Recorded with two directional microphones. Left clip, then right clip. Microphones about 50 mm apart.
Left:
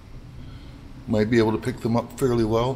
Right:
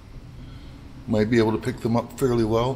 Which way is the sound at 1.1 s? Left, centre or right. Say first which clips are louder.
Even; left.